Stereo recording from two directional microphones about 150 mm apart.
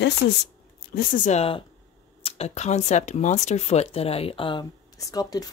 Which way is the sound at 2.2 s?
40° left (ahead or behind).